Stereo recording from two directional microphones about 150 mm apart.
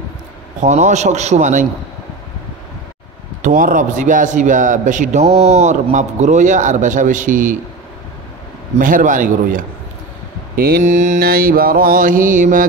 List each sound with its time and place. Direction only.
0.6 s a man's voice: 55° right (ahead or behind)
3.4 s a man's voice: 65° right (ahead or behind)
8.7 s a man's voice: 60° right (ahead or behind)
10.5 s mantra: 85° right; by 12.6 s 60° right (ahead or behind)